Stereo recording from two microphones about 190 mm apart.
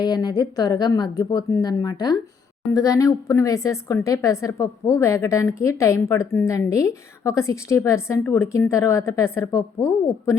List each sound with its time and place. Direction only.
0.0 s a woman's voice: 20° left (ahead or behind)